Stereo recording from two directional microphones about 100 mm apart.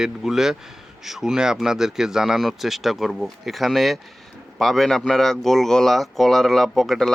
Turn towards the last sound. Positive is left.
turn(degrees=0)  # may be behind; listen again after turning